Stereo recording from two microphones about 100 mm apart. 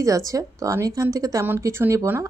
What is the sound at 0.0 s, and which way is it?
A woman's voice, 35° right (ahead or behind).